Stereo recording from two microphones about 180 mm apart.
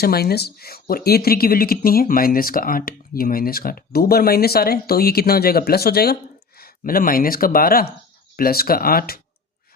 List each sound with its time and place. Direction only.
0.0 s speech: 60° left (ahead or behind)